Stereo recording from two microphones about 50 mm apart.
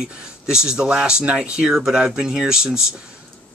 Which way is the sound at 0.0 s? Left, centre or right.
Centre.